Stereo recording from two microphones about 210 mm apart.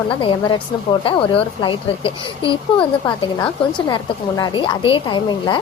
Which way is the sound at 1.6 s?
25° left (ahead or behind).